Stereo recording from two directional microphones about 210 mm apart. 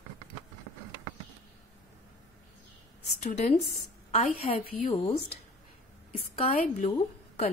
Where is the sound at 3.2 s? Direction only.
35° left (ahead or behind).